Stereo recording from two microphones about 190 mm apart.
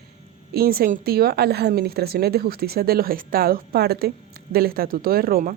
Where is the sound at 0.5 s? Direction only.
50° right (ahead or behind).